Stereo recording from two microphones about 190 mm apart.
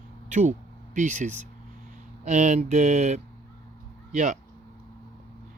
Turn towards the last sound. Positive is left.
turn(degrees=-40)  # may be behind; listen again after turning